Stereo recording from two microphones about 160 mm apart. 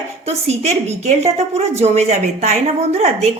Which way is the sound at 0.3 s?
40° right (ahead or behind).